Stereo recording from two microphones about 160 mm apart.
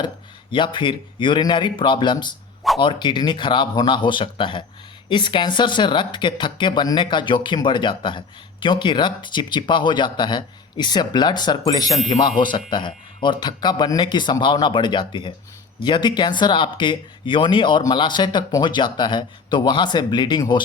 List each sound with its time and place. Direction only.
0.5 s speech: 30° left (ahead or behind)